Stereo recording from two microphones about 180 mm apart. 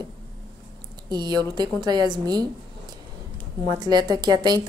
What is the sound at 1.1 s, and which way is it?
Speech, 25° right (ahead or behind).